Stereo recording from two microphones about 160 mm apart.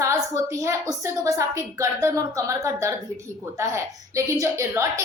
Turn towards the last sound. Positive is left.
turn(degrees=-15)  # may be behind; listen again after turning